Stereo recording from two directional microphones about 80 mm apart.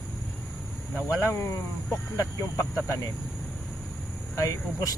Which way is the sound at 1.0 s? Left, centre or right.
Left.